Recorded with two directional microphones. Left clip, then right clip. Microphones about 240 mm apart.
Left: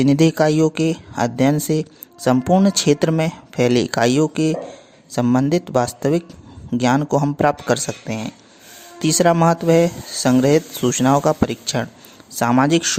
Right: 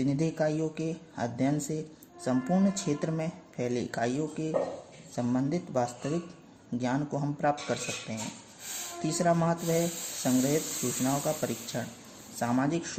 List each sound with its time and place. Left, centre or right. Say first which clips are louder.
0.0 s speech: left 14 dB; left